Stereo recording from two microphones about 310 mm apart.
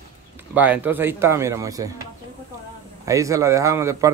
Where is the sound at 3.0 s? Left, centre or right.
Centre.